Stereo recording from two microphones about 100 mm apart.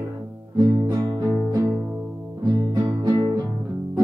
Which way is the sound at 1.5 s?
30° right (ahead or behind).